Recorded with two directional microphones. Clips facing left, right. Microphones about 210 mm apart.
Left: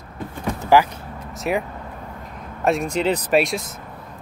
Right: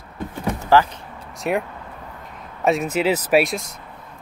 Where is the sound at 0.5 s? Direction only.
15° left (ahead or behind).